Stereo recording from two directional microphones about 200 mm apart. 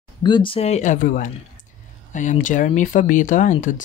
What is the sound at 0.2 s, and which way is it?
Speech, 25° left (ahead or behind).